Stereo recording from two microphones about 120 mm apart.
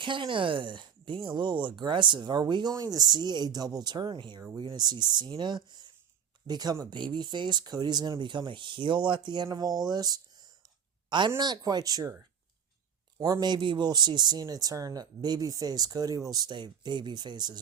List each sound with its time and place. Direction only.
0.0 s speech: 45° right (ahead or behind)
13.1 s speech: 35° right (ahead or behind)